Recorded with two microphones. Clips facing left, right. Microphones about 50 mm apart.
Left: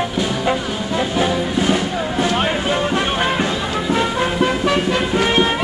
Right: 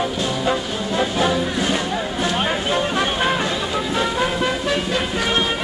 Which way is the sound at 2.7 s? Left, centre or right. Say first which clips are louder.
Left 2 dB; centre.